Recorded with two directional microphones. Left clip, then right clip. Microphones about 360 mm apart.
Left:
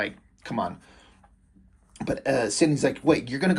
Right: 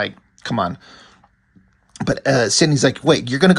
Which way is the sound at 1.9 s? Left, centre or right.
Right.